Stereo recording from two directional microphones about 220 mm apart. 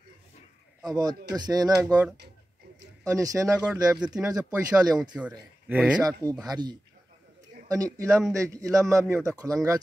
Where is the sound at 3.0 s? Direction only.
15° right (ahead or behind).